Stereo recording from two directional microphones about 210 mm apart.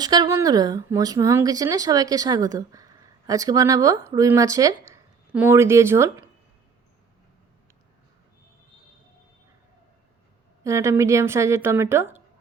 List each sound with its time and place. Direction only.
0.0 s speech: 20° right (ahead or behind)
10.6 s speech: 15° right (ahead or behind)